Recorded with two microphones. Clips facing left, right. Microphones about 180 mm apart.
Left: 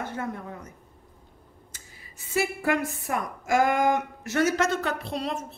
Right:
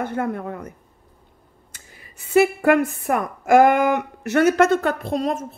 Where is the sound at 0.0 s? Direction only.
60° right (ahead or behind).